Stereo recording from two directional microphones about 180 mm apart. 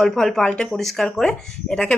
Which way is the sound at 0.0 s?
Centre (ahead or behind).